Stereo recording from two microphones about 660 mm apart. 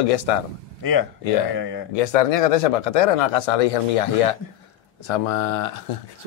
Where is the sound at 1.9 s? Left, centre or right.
Left.